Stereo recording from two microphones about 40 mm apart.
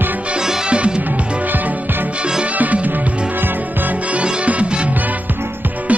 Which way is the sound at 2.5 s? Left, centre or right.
Right.